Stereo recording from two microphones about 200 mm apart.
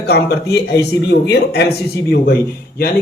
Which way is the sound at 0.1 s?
55° left (ahead or behind).